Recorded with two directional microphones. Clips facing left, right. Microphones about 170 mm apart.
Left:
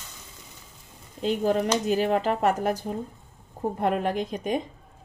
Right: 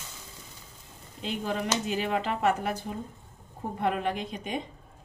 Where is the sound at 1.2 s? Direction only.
40° left (ahead or behind).